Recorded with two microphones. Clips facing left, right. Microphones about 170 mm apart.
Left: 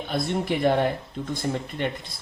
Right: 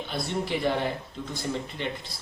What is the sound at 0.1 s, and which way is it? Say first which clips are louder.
Speech: left 4 dB; 55° left (ahead or behind).